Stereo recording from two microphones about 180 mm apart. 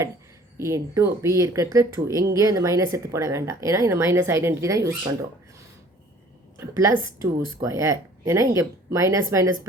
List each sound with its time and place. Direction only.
0.6 s a woman's voice: 15° right (ahead or behind)
6.6 s a woman's voice: 15° right (ahead or behind)